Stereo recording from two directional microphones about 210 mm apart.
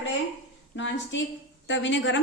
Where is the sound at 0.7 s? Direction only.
60° left (ahead or behind).